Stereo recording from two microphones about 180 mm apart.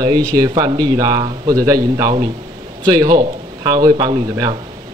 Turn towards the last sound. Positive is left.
turn(degrees=-25)  # may be behind; listen again after turning